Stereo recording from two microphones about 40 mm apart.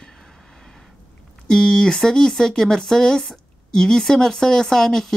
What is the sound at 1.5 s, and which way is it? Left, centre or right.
Speech, centre.